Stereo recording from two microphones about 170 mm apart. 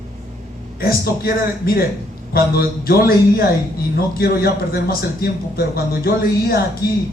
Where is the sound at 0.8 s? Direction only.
60° left (ahead or behind).